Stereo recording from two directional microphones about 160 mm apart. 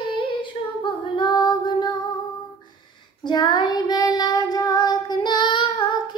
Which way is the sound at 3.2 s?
30° left (ahead or behind).